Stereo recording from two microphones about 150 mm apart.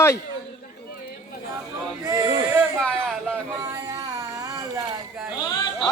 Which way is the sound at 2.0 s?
25° right (ahead or behind).